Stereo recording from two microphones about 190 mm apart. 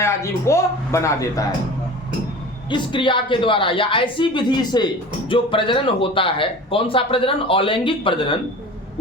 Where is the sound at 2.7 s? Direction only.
25° left (ahead or behind).